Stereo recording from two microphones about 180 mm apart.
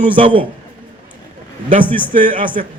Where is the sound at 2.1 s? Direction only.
45° right (ahead or behind).